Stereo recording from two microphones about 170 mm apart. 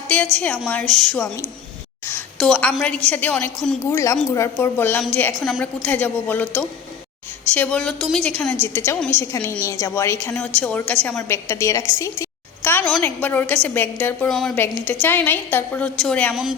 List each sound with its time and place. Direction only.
0.1 s a woman's voice: 10° left (ahead or behind)
2.0 s a sound: 10° left (ahead or behind)
2.7 s a woman's voice: 5° left (ahead or behind)
3.8 s a woman's voice: 15° left (ahead or behind); by 16.6 s 5° right (ahead or behind)